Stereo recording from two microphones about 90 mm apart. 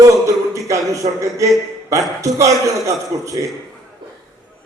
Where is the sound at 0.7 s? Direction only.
35° right (ahead or behind).